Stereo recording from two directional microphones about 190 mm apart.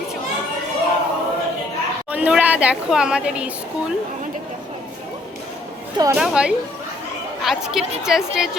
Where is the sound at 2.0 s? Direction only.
5° right (ahead or behind).